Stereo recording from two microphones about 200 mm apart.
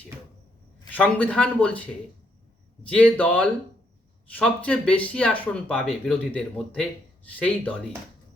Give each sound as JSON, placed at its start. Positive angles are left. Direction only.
{"t": 0.9, "sound": "speech", "side_deg": 5}